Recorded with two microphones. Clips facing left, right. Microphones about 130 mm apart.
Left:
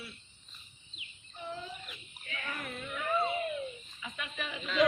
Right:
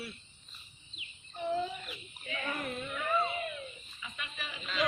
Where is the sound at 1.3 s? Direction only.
65° right (ahead or behind).